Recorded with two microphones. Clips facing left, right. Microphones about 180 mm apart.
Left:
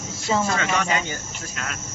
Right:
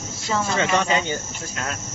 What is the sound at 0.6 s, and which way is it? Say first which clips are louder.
Speech: right 3 dB; 25° right (ahead or behind).